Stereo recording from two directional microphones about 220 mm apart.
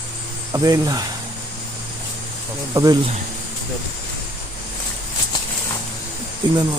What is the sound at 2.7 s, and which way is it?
Speech, 15° right (ahead or behind).